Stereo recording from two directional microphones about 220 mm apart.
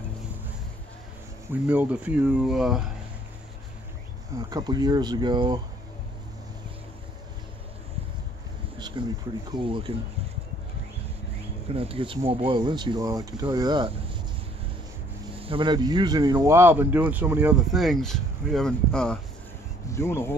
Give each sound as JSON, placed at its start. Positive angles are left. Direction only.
{"t": 1.5, "sound": "speech", "side_deg": -5}
{"t": 4.4, "sound": "speech", "side_deg": -20}
{"t": 8.7, "sound": "insect", "side_deg": -20}
{"t": 9.6, "sound": "speech", "side_deg": -25}
{"t": 11.7, "sound": "speech", "side_deg": -25}
{"t": 15.4, "sound": "speech", "side_deg": -20}